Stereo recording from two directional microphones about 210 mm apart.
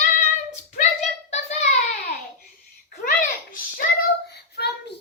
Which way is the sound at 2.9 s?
40° left (ahead or behind).